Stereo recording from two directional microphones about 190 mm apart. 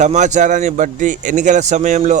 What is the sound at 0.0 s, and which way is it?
A man's voice, 40° right (ahead or behind).